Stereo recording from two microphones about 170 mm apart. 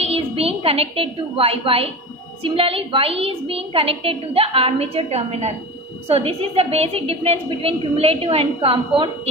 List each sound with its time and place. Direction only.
0.0 s a woman's voice: 35° right (ahead or behind)